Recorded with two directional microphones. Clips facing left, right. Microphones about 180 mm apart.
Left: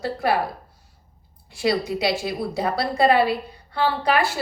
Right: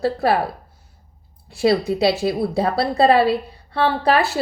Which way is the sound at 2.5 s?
30° right (ahead or behind).